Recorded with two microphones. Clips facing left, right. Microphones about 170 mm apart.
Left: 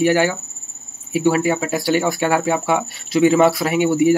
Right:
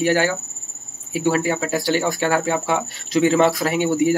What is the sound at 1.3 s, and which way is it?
Speech, 20° left (ahead or behind).